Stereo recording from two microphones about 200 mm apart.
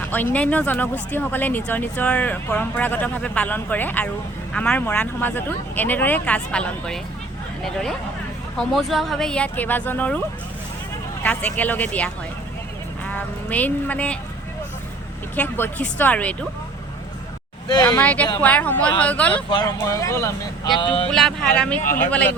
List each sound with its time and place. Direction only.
0.0 s a sound: 10° left (ahead or behind)
0.3 s speech: 5° left (ahead or behind)
15.4 s speech: 10° left (ahead or behind)
17.7 s speech: 15° left (ahead or behind)
19.5 s speech: 20° left (ahead or behind)
20.7 s speech: 25° left (ahead or behind)
21.1 s speech: 5° left (ahead or behind)